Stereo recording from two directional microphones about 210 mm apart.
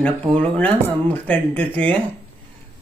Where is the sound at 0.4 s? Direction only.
5° left (ahead or behind).